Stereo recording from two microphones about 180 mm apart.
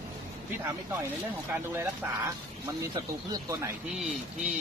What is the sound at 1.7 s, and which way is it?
Speech, 15° right (ahead or behind).